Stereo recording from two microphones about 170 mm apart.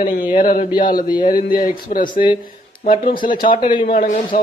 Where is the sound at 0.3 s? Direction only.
55° left (ahead or behind).